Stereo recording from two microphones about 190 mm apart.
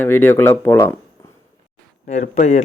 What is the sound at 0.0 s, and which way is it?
Speech, 10° left (ahead or behind).